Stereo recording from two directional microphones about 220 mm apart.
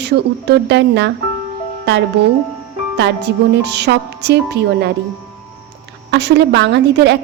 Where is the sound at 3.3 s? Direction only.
50° right (ahead or behind).